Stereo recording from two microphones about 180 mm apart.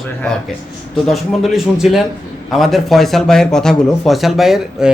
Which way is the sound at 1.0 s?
Centre (ahead or behind).